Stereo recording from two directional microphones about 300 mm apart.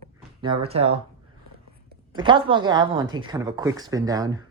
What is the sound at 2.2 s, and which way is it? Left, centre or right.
Speech, centre.